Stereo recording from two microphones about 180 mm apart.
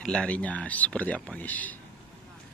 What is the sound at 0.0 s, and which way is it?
Speech, 5° left (ahead or behind).